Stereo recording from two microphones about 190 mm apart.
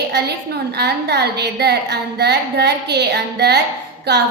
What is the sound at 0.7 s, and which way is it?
A woman's voice, 60° right (ahead or behind).